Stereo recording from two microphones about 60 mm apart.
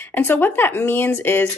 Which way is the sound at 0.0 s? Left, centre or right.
Left.